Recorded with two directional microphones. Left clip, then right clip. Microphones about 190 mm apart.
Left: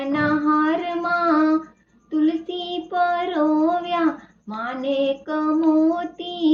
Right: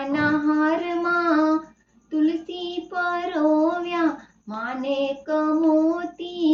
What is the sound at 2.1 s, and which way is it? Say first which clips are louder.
Child singing: left 2 dB; 20° left (ahead or behind).